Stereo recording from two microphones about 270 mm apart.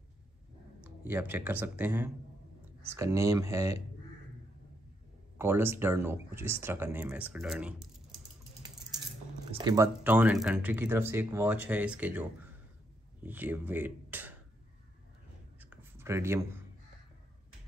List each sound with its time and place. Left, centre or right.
0.8 s speech: centre
5.4 s speech: centre
9.5 s speech: centre
15.6 s a sound: centre